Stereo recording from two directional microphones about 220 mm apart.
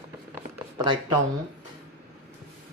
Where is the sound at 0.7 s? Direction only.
20° right (ahead or behind).